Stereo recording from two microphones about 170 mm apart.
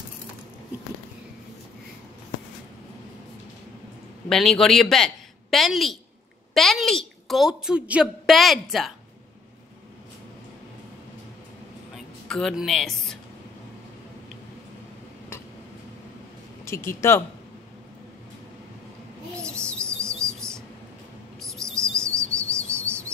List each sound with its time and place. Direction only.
4.3 s a woman's voice: centre (ahead or behind)
11.9 s music: centre (ahead or behind)
16.6 s speech: 15° left (ahead or behind)
19.3 s bird: 5° left (ahead or behind)